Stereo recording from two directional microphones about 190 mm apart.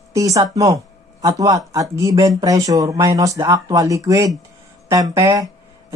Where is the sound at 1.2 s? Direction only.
20° right (ahead or behind).